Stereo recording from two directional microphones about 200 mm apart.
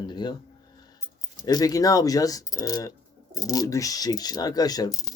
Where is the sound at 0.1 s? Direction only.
20° left (ahead or behind).